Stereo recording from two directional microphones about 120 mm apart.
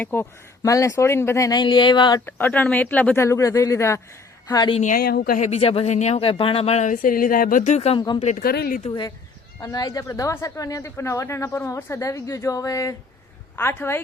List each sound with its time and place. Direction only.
0.0 s speech: 20° left (ahead or behind); by 2.2 s 40° left (ahead or behind)
2.2 s speech: 15° left (ahead or behind)
3.2 s speech: 25° left (ahead or behind)
5.4 s speech: 55° left (ahead or behind); by 7.1 s 90° left
7.5 s speech: 75° left (ahead or behind)
7.9 s speech: 40° left (ahead or behind)
8.2 s speech: 75° left (ahead or behind)
9.6 s speech: 30° left (ahead or behind)